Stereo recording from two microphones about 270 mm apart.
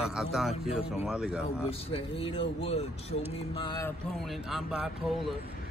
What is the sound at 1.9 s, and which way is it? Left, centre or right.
Speech, centre.